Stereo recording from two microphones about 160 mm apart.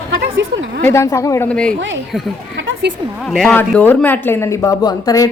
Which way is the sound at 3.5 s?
10° left (ahead or behind).